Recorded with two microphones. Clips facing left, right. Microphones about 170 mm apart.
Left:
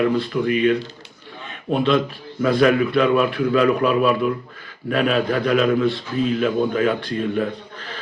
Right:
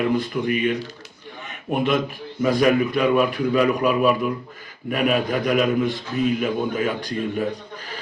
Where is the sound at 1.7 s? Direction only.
15° right (ahead or behind).